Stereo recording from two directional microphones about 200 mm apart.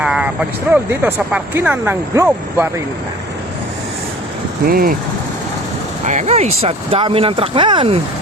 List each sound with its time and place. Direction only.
0.0 s vehicle: 5° right (ahead or behind)
0.7 s speech: 10° right (ahead or behind)
4.7 s speech: 45° right (ahead or behind)
6.1 s speech: 35° right (ahead or behind)